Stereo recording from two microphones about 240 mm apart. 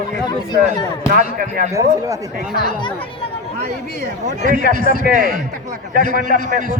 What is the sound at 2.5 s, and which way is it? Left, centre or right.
Speech, centre.